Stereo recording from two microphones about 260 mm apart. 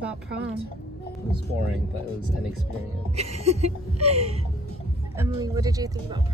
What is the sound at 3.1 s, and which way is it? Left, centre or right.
Speech, right.